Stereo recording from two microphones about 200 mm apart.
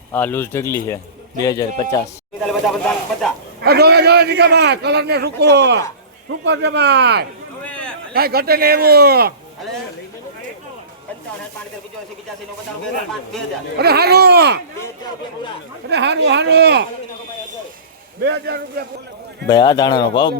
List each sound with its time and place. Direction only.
0.1 s speech: 10° left (ahead or behind)
2.5 s speech: centre (ahead or behind)
3.6 s a man's voice: 55° right (ahead or behind)
7.7 s a sound: 5° left (ahead or behind)
8.1 s speech: 50° right (ahead or behind)
13.7 s speech: 50° right (ahead or behind)
15.9 s a man's voice: 60° right (ahead or behind)
18.2 s speech: 55° right (ahead or behind)
19.5 s speech: 20° left (ahead or behind)